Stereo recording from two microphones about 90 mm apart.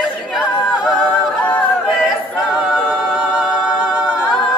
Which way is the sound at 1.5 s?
10° left (ahead or behind).